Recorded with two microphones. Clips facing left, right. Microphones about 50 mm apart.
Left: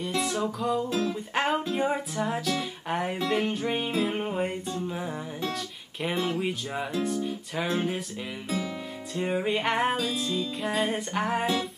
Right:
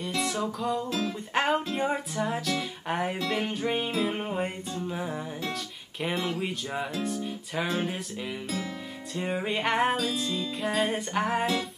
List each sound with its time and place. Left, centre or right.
0.0 s music: centre
0.8 s music: left
1.3 s music: centre
9.1 s music: centre